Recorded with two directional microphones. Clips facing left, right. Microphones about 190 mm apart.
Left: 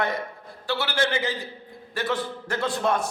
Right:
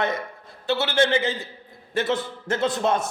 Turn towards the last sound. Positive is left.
turn(degrees=-20)  # may be behind; listen again after turning